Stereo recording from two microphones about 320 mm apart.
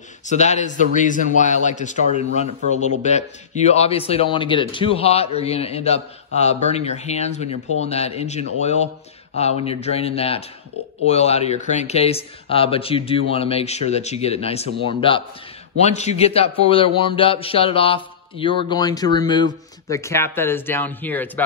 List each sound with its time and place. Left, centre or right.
0.3 s a man's voice: left; by 21.3 s centre